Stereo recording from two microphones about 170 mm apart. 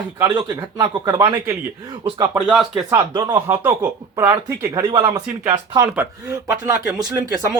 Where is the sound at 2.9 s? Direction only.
25° right (ahead or behind).